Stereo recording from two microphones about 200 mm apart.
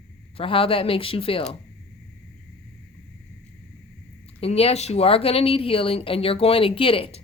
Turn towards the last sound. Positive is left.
turn(degrees=25)  # may be behind; listen again after turning